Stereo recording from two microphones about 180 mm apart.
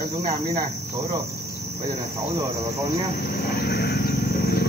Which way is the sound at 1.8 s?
20° right (ahead or behind).